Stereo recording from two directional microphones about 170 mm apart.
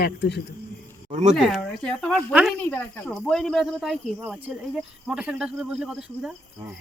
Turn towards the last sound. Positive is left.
turn(degrees=-5)  # may be behind; listen again after turning